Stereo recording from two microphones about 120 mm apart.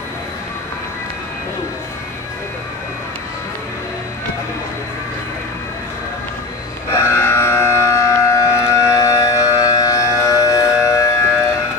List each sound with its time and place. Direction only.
6.9 s civil defense siren: 20° left (ahead or behind)